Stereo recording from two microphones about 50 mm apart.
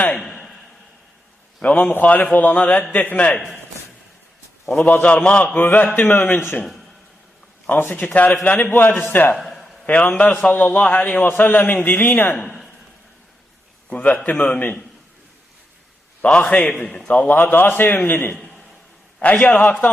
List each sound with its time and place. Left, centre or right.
1.6 s a man's voice: left
4.8 s a man's voice: left
5.5 s a man's voice: left
7.8 s a man's voice: left
9.4 s a sound: centre
9.8 s a man's voice: left
13.9 s a man's voice: left
16.2 s a man's voice: left
17.4 s a man's voice: left